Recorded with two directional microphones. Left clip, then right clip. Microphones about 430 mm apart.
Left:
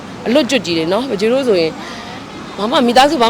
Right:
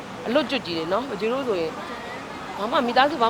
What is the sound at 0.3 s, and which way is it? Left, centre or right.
Speech, left.